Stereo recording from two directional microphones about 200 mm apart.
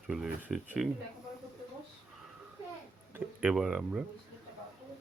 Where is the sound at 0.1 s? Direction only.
Centre (ahead or behind).